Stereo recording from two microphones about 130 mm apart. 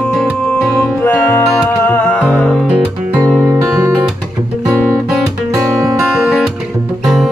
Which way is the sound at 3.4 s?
25° right (ahead or behind).